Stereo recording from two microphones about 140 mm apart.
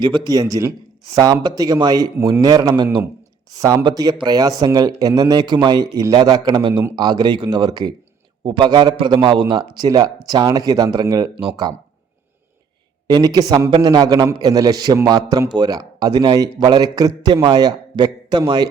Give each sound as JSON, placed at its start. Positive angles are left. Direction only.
{"t": 0.0, "sound": "a man's voice", "side_deg": -30}
{"t": 13.1, "sound": "a man's voice", "side_deg": -30}